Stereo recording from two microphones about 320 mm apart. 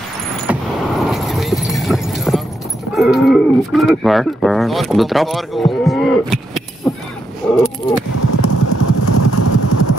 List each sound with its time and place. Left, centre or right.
0.5 s keys jangling: centre
2.9 s speech: centre
7.4 s a sound: centre
8.2 s vehicle: left